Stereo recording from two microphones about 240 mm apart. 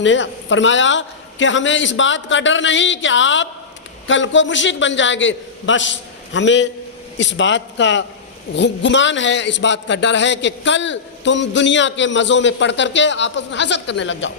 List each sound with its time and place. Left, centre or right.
0.0 s a man's voice: left